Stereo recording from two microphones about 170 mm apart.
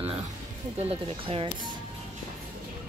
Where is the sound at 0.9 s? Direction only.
35° right (ahead or behind).